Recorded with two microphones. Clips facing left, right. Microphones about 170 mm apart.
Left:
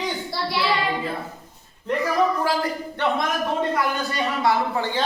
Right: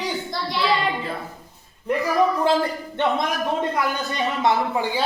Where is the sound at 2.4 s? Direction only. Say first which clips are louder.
Right 4 dB; 25° right (ahead or behind).